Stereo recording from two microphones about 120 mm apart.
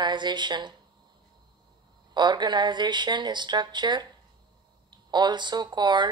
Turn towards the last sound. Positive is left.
turn(degrees=-40)  # may be behind; listen again after turning